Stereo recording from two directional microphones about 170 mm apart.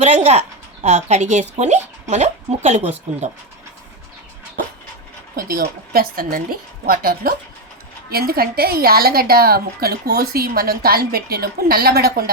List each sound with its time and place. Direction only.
0.0 s a woman's voice: 40° right (ahead or behind)
5.4 s a woman's voice: 60° right (ahead or behind)